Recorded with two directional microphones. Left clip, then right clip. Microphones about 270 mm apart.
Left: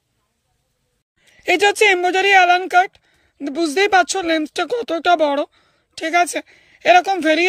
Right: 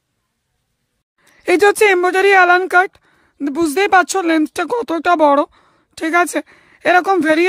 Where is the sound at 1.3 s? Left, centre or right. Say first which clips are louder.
Right 3 dB; centre.